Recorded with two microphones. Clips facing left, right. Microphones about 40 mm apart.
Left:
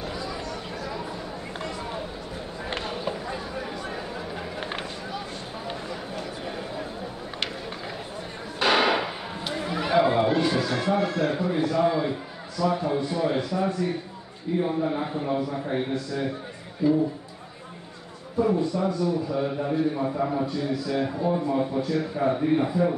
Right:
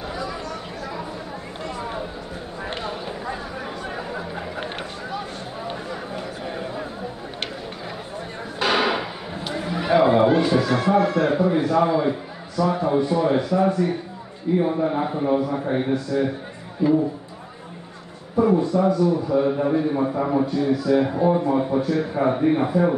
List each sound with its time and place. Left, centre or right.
8.5 s a sound: centre
9.9 s chatter: right
10.6 s a man's voice: right
14.6 s a man's voice: right
15.9 s a man's voice: right
18.4 s a man's voice: right
20.2 s a man's voice: right
20.4 s a man's voice: right
22.3 s a man's voice: right
22.7 s a man's voice: right